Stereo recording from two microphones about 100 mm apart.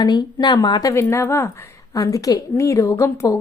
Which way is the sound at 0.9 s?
30° left (ahead or behind).